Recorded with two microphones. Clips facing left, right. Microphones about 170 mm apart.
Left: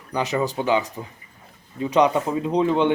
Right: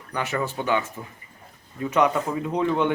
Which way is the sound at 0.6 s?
20° left (ahead or behind).